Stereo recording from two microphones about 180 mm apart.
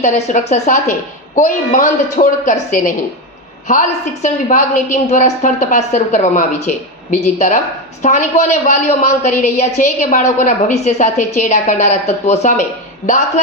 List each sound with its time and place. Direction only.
0.0 s a woman's voice: 40° left (ahead or behind)